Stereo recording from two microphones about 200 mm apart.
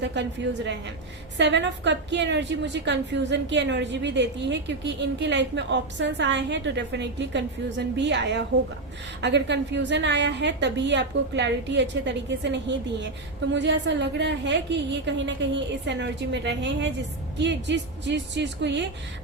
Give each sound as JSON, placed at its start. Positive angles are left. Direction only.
{"t": 0.0, "sound": "a woman's voice", "side_deg": -60}